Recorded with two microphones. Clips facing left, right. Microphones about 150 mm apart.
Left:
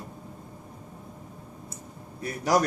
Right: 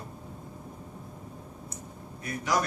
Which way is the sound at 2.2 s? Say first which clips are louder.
Left 4 dB; 35° left (ahead or behind).